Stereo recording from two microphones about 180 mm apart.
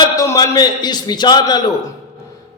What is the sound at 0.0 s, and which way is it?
A man's voice, 20° left (ahead or behind).